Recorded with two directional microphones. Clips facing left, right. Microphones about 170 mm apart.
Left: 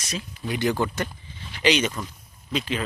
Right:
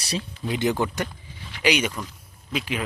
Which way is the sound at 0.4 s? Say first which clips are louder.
Even; 20° right (ahead or behind).